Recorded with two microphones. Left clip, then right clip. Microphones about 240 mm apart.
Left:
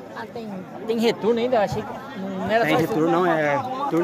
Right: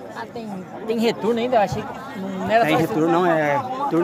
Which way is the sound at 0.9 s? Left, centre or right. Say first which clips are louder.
Even; centre.